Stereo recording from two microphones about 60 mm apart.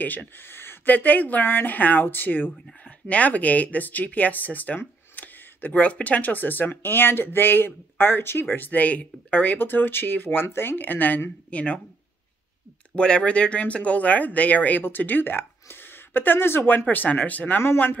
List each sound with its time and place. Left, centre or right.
0.0 s speech: left
0.5 s a sound: left
0.8 s speech: left
12.9 s speech: centre